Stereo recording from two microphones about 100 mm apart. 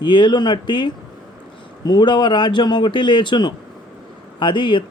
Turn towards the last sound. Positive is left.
turn(degrees=50)  # may be behind; listen again after turning